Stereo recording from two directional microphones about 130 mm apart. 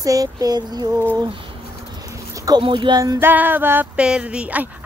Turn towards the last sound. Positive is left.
turn(degrees=-10)  # may be behind; listen again after turning